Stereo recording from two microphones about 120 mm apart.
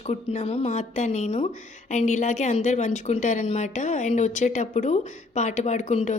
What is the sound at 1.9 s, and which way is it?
A woman's voice, 75° left (ahead or behind).